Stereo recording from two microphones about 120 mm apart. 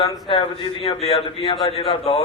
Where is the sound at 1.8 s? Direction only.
55° left (ahead or behind).